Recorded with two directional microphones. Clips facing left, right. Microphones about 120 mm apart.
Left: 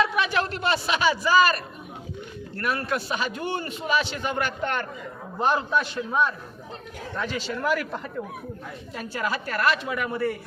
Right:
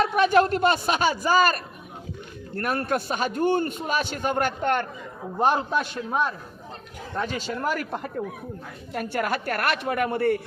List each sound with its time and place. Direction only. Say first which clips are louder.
0.0 s a man's voice: right 5 dB; 45° right (ahead or behind)
8.9 s a woman's voice: right 3 dB; 60° right (ahead or behind)